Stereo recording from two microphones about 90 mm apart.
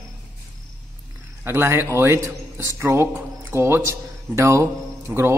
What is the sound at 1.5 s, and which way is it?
A man's voice, 30° right (ahead or behind).